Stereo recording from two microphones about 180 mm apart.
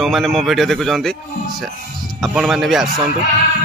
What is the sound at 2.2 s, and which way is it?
Speech, centre (ahead or behind).